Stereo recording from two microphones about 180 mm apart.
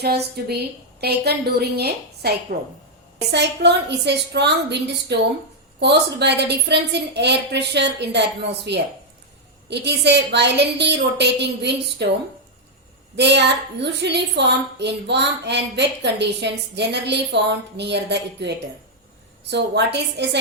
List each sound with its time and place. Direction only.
0.0 s a woman's voice: 60° right (ahead or behind)
13.1 s a woman's voice: 70° right (ahead or behind)